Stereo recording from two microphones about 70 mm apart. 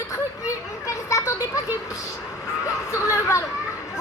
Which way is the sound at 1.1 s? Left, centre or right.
Left.